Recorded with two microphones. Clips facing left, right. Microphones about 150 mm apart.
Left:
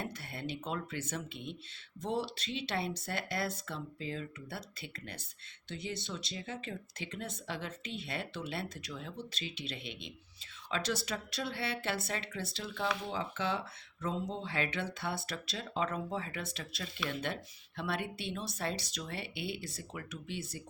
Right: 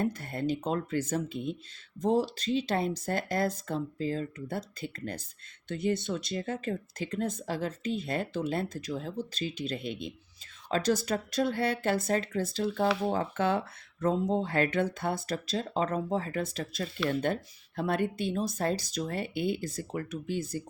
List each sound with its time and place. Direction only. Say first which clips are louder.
0.0 s speech: right 10 dB; 45° right (ahead or behind)